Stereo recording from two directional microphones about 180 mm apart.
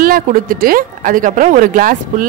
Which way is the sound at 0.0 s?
50° right (ahead or behind).